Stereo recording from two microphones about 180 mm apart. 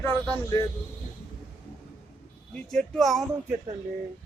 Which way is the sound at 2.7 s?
Centre (ahead or behind).